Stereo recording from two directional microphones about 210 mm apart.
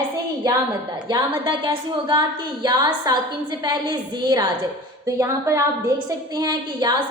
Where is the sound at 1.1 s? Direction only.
20° right (ahead or behind).